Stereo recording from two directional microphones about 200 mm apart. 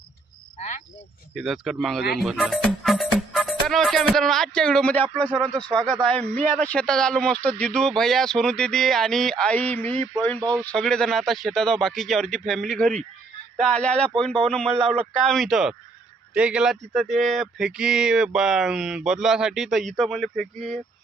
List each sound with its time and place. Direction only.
1.4 s speech: centre (ahead or behind)
14.8 s speech: 30° right (ahead or behind)
15.3 s speech: centre (ahead or behind)